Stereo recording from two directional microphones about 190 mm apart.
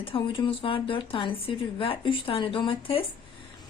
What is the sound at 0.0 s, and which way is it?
A woman's voice, 30° left (ahead or behind).